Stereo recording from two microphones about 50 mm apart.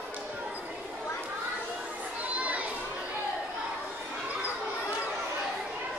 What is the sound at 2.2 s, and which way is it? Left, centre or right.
Children playing, right.